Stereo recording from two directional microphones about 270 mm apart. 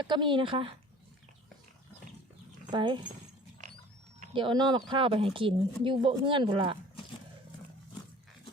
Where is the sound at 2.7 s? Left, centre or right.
Centre.